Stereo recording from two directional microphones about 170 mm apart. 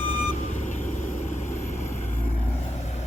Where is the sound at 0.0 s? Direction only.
40° left (ahead or behind).